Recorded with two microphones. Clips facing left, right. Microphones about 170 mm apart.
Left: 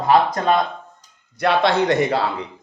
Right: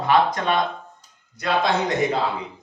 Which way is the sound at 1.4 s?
70° left (ahead or behind).